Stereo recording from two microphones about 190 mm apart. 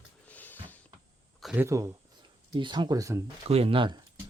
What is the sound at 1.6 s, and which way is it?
Speech, 15° right (ahead or behind).